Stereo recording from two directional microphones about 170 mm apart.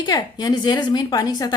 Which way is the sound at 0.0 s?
25° left (ahead or behind).